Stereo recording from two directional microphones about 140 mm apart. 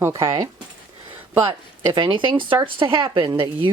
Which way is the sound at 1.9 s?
35° right (ahead or behind).